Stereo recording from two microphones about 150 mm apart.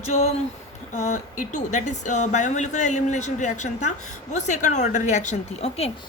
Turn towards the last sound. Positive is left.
turn(degrees=45)  # may be behind; listen again after turning